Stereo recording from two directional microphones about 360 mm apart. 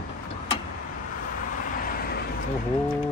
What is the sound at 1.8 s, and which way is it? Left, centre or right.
Vehicle, left.